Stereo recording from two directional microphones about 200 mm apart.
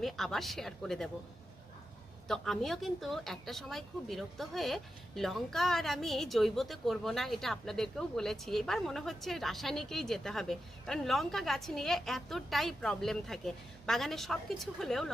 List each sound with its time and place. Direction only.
0.0 s speech: centre (ahead or behind)
2.2 s speech: centre (ahead or behind)